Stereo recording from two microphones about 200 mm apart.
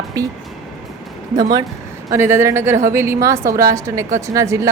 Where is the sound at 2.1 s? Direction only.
10° right (ahead or behind).